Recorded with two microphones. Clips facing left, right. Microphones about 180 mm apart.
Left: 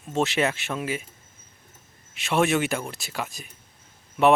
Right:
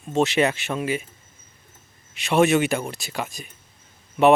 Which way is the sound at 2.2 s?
Centre (ahead or behind).